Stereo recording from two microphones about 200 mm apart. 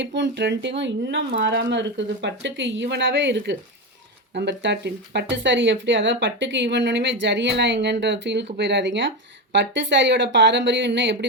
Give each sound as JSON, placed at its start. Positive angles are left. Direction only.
{"t": 0.0, "sound": "a woman's voice", "side_deg": -60}